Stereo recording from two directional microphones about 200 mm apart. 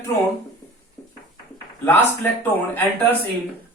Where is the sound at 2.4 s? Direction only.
10° left (ahead or behind).